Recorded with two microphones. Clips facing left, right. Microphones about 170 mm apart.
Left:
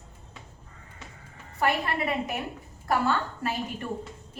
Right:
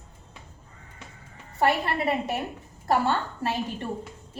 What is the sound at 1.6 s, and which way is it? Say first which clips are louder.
A woman's voice: right 3 dB; 30° right (ahead or behind).